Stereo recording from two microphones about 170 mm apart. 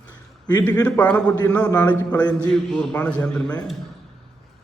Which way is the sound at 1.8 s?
20° left (ahead or behind).